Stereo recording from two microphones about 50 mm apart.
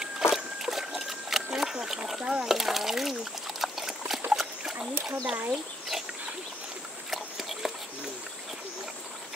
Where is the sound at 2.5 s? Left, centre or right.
Centre.